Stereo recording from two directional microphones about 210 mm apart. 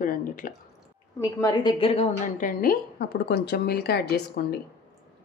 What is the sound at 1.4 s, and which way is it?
Speech, 20° left (ahead or behind).